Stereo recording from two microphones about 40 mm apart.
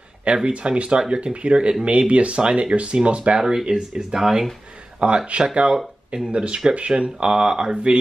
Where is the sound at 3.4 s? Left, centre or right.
Centre.